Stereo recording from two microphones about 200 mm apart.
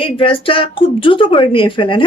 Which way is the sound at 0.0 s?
25° left (ahead or behind).